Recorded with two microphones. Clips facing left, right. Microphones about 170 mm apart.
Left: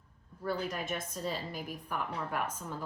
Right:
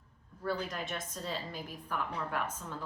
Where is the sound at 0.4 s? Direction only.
10° left (ahead or behind).